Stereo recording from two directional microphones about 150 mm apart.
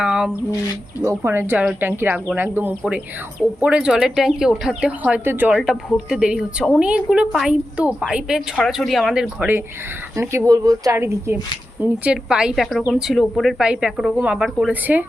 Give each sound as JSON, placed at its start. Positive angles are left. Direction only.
{"t": 0.0, "sound": "a sound", "side_deg": -5}
{"t": 1.0, "sound": "speech", "side_deg": -15}
{"t": 10.2, "sound": "speech", "side_deg": -20}